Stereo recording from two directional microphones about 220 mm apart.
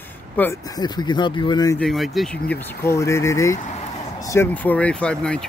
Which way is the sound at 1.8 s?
Centre (ahead or behind).